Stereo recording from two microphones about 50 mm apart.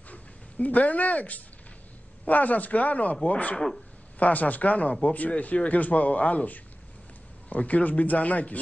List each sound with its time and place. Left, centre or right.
0.1 s a sound: left
2.2 s speech: left
3.5 s speech: centre
4.2 s speech: left